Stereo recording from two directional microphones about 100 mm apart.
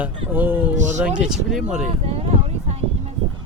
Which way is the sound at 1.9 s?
90° right.